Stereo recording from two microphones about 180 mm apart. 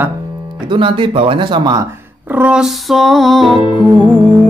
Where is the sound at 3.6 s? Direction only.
25° left (ahead or behind).